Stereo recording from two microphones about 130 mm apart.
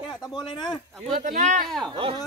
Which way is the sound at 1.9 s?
45° right (ahead or behind).